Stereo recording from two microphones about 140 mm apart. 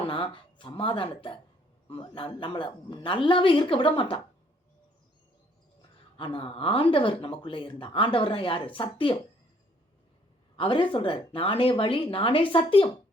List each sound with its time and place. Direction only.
0.0 s speech: 40° left (ahead or behind)
6.1 s speech: 40° left (ahead or behind)
10.6 s speech: 40° left (ahead or behind)